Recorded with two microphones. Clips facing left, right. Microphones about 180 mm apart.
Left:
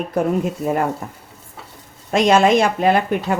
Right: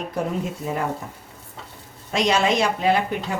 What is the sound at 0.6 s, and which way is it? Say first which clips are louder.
Speech: left 6 dB; 55° left (ahead or behind).